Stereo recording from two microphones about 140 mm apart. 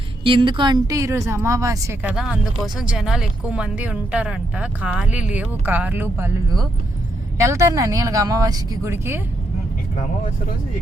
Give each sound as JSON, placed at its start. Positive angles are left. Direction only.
{"t": 0.3, "sound": "speech", "side_deg": -35}
{"t": 2.0, "sound": "speech", "side_deg": -10}
{"t": 7.3, "sound": "speech", "side_deg": -20}